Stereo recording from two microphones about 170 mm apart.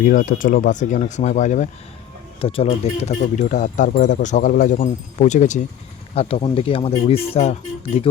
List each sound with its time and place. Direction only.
0.0 s speech: 50° left (ahead or behind)
2.4 s speech: 35° left (ahead or behind)